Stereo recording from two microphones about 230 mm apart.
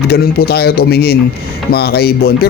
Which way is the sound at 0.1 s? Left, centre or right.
Left.